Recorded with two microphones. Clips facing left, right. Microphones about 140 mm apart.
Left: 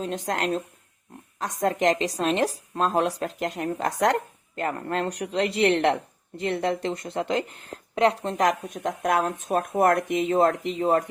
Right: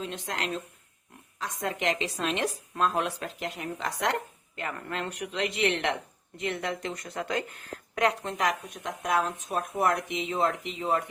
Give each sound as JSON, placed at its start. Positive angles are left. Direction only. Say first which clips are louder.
{"t": 0.0, "sound": "a woman's voice", "louder": "left 7 dB", "side_deg": 45}